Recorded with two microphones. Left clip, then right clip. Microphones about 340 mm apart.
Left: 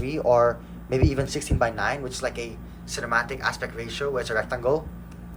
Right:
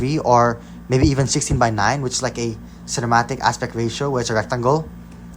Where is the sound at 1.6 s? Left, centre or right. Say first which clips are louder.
Right 6 dB; centre.